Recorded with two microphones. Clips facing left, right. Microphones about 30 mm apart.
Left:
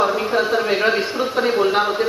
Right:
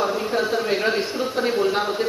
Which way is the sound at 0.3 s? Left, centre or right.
Left.